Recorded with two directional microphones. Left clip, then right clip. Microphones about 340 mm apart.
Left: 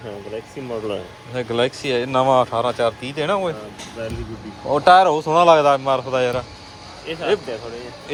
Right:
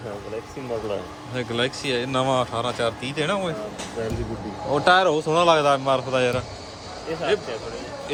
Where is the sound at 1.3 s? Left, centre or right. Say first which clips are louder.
Left 5 dB; centre.